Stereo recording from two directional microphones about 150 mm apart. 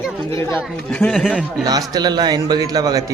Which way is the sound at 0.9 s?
5° left (ahead or behind).